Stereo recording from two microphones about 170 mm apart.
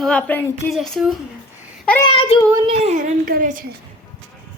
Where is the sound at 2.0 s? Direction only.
35° left (ahead or behind).